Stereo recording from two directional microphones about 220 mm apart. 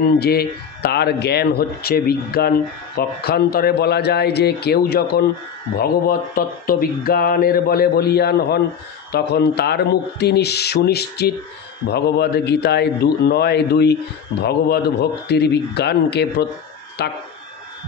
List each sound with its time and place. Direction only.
0.2 s speech: 45° left (ahead or behind)